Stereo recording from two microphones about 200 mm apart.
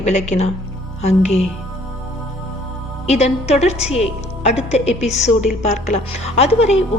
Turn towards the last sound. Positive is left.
turn(degrees=30)  # may be behind; listen again after turning